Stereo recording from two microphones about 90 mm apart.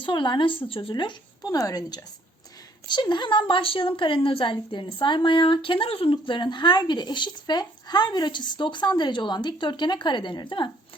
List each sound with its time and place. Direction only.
0.0 s speech: 65° left (ahead or behind)
1.4 s a woman's voice: 40° left (ahead or behind)
2.8 s a woman's voice: 55° left (ahead or behind)